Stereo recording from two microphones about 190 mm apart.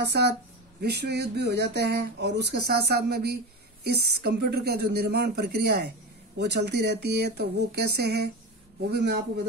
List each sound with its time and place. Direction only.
0.0 s speech: 60° right (ahead or behind)